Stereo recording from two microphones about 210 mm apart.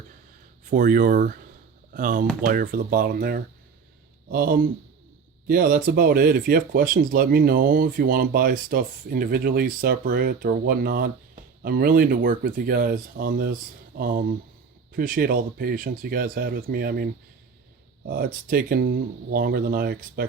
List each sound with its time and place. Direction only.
0.6 s speech: 40° right (ahead or behind)